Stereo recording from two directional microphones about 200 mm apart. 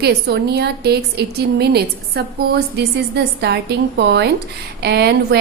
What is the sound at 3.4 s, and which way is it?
A woman's voice, 55° right (ahead or behind).